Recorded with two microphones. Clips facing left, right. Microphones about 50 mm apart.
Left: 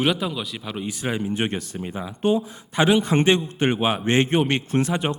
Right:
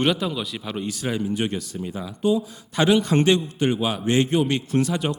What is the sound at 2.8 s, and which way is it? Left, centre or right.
Speech, centre.